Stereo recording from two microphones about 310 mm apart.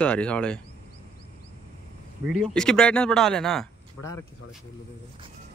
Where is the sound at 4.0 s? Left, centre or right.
Left.